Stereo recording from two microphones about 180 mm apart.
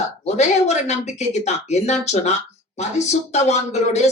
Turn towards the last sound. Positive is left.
turn(degrees=40)  # may be behind; listen again after turning